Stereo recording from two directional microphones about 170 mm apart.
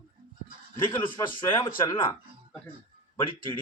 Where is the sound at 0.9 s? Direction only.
25° left (ahead or behind).